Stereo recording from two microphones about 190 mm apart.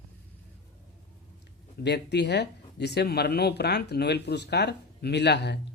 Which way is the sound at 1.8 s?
65° left (ahead or behind).